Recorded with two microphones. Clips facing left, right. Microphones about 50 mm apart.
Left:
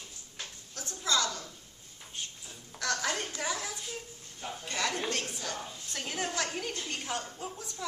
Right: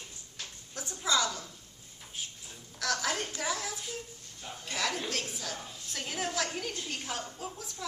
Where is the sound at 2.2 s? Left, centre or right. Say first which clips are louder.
Even; centre.